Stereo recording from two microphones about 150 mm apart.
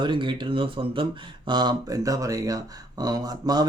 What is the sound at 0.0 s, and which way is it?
Speech, 30° right (ahead or behind).